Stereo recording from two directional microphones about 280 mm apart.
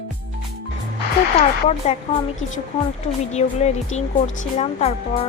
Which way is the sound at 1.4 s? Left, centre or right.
Left.